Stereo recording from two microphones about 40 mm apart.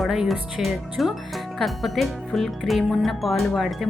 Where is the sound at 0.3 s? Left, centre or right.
Centre.